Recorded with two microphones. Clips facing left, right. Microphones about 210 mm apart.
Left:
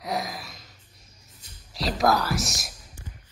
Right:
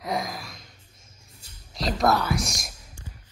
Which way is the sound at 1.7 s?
Centre (ahead or behind).